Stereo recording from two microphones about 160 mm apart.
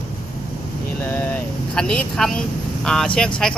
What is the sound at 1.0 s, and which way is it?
Speech, 10° left (ahead or behind).